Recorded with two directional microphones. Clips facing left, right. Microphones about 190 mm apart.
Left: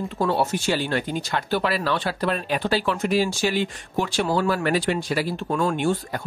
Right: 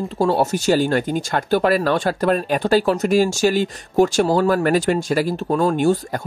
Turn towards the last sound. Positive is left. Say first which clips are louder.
# right 6 dB
turn(degrees=-40)  # may be behind; listen again after turning